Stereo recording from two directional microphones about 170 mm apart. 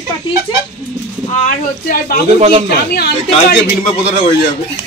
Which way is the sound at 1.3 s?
55° left (ahead or behind).